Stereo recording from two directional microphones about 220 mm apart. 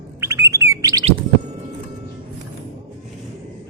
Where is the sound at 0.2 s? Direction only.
15° right (ahead or behind).